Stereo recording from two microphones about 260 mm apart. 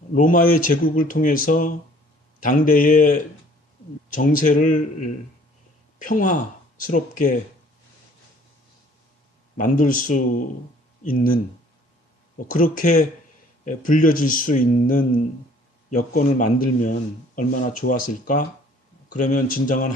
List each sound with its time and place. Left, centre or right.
0.1 s a man's voice: left
9.6 s speech: left
12.4 s a man's voice: left